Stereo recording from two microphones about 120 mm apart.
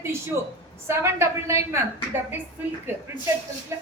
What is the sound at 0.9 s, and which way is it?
Speech, 20° right (ahead or behind).